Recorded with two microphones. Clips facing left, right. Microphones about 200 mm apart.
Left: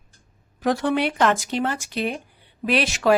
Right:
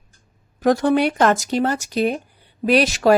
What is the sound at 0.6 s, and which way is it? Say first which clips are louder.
Speech: right 5 dB; 40° right (ahead or behind).